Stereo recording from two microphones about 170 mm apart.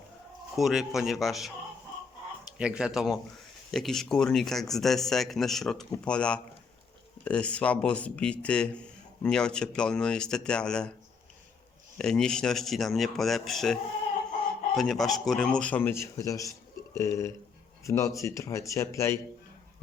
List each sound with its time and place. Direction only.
0.5 s a man's voice: centre (ahead or behind)
2.6 s a man's voice: 5° right (ahead or behind)
11.9 s a man's voice: 5° left (ahead or behind)
14.8 s a man's voice: centre (ahead or behind); by 19.2 s 15° left (ahead or behind)